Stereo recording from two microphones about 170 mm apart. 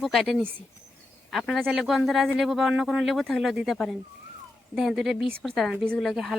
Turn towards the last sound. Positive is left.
turn(degrees=0)  # may be behind; listen again after turning